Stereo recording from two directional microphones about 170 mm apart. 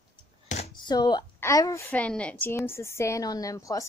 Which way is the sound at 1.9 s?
5° left (ahead or behind).